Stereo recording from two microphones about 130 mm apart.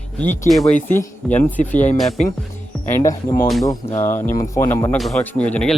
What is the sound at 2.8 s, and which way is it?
Speech, 20° left (ahead or behind).